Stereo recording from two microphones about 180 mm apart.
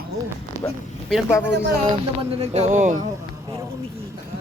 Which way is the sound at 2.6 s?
40° right (ahead or behind).